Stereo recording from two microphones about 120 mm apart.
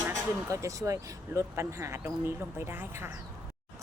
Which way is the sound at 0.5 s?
25° right (ahead or behind).